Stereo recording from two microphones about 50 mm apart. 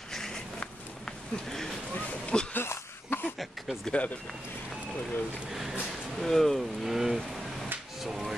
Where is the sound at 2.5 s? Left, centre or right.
Left.